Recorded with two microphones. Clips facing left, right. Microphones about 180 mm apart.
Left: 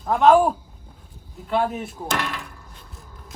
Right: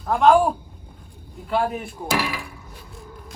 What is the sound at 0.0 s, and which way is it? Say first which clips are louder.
Speech: left 1 dB; centre (ahead or behind).